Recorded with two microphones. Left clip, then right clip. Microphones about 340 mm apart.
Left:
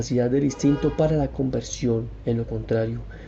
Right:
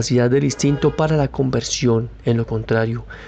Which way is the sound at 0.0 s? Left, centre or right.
Right.